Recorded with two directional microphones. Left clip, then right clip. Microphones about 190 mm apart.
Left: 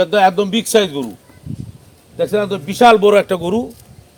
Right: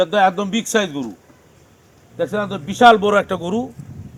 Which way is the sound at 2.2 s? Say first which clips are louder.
Left 5 dB; 40° left (ahead or behind).